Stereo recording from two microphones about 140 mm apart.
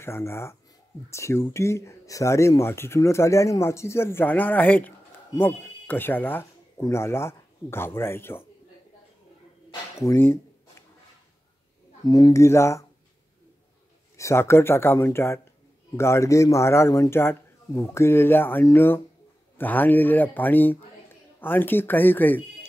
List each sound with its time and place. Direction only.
0.0 s speech: 20° left (ahead or behind)
10.0 s speech: 15° left (ahead or behind)
12.0 s speech: 25° left (ahead or behind)
14.1 s speech: 20° left (ahead or behind)